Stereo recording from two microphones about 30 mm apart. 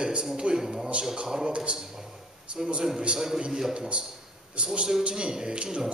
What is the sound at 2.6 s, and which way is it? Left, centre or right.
Speech, right.